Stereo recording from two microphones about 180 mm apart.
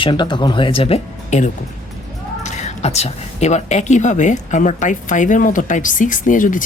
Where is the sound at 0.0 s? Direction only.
25° left (ahead or behind).